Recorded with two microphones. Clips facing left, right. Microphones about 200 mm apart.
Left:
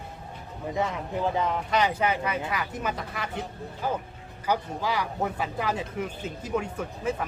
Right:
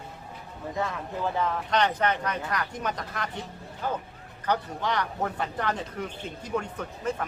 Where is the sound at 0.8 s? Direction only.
20° left (ahead or behind).